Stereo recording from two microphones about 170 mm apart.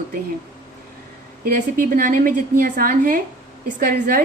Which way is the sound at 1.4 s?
55° right (ahead or behind).